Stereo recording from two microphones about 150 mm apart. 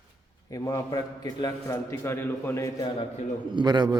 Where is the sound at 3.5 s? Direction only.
30° right (ahead or behind).